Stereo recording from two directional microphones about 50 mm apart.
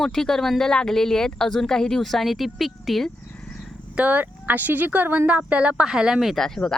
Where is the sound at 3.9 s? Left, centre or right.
Right.